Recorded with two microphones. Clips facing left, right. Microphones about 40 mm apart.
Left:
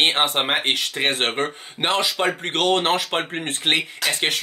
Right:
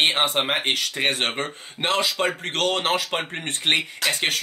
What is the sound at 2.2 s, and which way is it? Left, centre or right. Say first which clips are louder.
Speech: left 3 dB; centre.